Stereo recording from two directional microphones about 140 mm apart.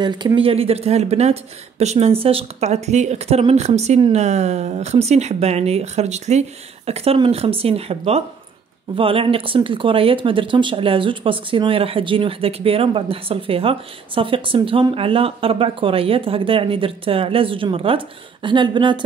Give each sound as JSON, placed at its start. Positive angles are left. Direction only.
{"t": 0.0, "sound": "speech", "side_deg": -30}